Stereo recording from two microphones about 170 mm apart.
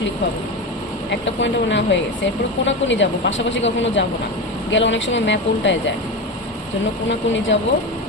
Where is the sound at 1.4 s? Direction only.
90° left.